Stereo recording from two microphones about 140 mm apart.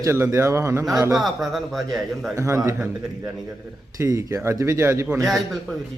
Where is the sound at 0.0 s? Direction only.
20° right (ahead or behind).